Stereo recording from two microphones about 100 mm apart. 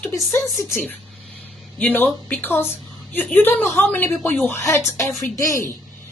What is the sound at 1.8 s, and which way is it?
A woman's voice, 15° left (ahead or behind).